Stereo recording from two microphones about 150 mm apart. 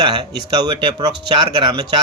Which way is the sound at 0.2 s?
35° right (ahead or behind).